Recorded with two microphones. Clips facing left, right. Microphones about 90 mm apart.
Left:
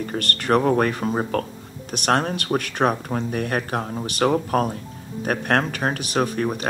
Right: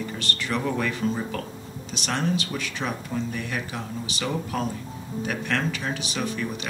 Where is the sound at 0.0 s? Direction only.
55° left (ahead or behind).